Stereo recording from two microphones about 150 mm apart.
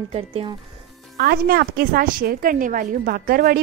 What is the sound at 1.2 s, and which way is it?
A woman's voice, 85° right.